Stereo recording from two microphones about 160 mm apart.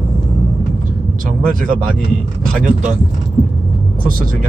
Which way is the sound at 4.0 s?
60° right (ahead or behind).